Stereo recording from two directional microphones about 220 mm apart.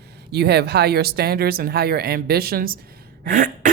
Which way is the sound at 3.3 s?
35° right (ahead or behind).